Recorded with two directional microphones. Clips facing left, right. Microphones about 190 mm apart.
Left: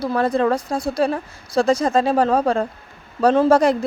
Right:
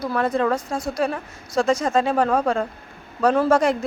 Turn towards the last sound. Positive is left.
turn(degrees=35)  # may be behind; listen again after turning